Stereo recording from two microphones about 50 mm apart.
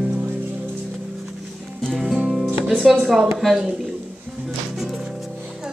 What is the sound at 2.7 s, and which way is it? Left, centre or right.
Speech, centre.